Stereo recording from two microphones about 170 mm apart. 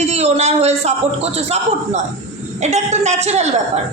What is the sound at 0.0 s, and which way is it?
A man's voice, 40° right (ahead or behind).